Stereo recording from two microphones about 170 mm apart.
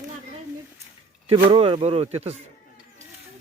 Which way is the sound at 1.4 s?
30° right (ahead or behind).